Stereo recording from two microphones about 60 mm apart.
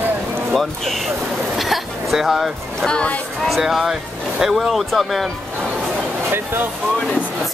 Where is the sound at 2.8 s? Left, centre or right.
Centre.